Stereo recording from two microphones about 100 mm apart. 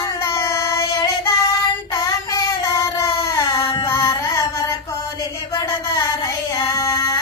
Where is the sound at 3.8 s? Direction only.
30° left (ahead or behind).